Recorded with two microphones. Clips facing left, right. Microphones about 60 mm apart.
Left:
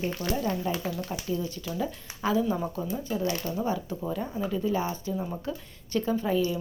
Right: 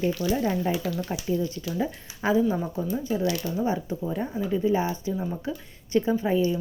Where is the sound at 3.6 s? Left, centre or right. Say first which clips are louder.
Right 4 dB; centre.